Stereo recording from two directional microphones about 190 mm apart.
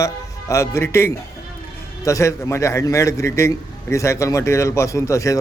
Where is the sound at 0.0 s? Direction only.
15° left (ahead or behind).